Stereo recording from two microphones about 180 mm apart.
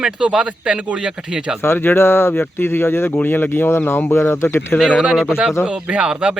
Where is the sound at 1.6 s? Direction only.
10° left (ahead or behind).